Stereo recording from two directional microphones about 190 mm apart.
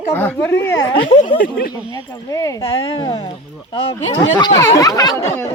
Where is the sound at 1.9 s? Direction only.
15° left (ahead or behind).